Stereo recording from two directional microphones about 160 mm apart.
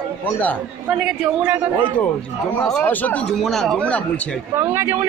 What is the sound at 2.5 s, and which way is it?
Speech, 5° left (ahead or behind).